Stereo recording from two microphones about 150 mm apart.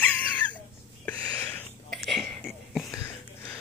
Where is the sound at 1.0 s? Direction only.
10° left (ahead or behind).